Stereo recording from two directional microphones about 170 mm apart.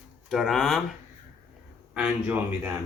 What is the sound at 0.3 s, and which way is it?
Speech, centre (ahead or behind).